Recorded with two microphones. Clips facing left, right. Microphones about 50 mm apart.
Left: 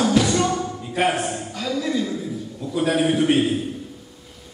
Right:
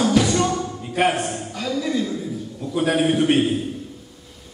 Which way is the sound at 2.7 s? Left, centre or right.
Centre.